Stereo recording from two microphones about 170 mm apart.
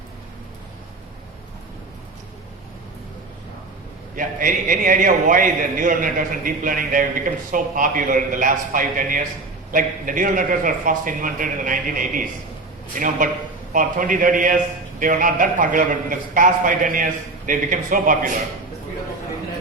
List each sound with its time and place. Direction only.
4.1 s a man's voice: 55° right (ahead or behind)